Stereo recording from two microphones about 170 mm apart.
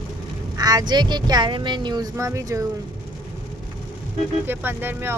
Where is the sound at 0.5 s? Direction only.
20° right (ahead or behind).